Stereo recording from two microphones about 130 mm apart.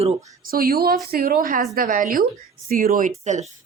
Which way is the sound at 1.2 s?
90° right.